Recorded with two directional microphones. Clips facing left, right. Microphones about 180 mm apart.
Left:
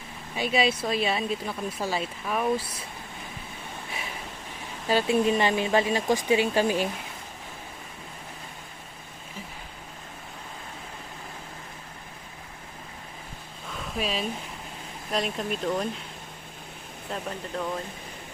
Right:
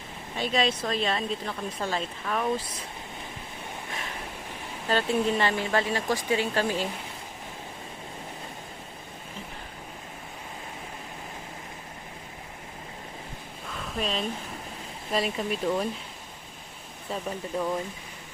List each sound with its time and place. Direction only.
0.3 s a woman's voice: 10° left (ahead or behind)
4.9 s a woman's voice: 10° left (ahead or behind)
13.7 s a sound: 5° left (ahead or behind)
15.1 s speech: centre (ahead or behind)
17.5 s speech: 10° right (ahead or behind)